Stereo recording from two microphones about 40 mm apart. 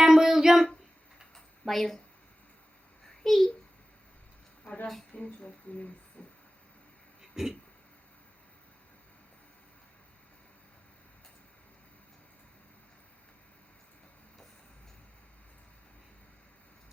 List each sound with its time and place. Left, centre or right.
0.0 s child singing: centre
1.6 s speech: centre
3.2 s a child's voice: centre
4.6 s speech: left
6.2 s vehicle: left
7.2 s a sound: centre